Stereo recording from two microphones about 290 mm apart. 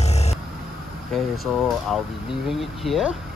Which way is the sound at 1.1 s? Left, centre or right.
Centre.